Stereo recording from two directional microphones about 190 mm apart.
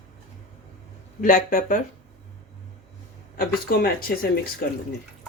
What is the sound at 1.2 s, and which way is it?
Speech, 45° left (ahead or behind).